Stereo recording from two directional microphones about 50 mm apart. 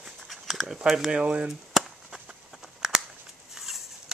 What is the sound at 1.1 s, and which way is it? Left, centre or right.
Speech, centre.